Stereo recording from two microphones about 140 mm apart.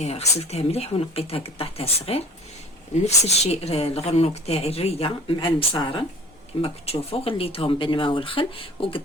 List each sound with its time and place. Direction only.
0.0 s a woman's voice: 50° left (ahead or behind)